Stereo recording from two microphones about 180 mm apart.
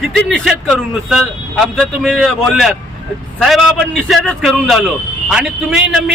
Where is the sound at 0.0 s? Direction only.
Centre (ahead or behind).